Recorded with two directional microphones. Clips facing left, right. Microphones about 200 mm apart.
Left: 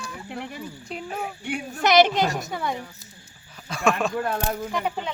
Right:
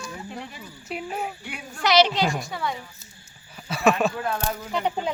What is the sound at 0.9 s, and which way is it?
Speech, 5° right (ahead or behind).